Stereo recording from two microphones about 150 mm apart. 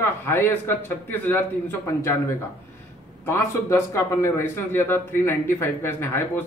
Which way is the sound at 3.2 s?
15° left (ahead or behind).